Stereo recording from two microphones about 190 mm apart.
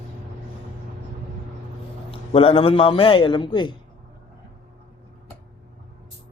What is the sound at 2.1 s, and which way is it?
A man's voice, 30° left (ahead or behind).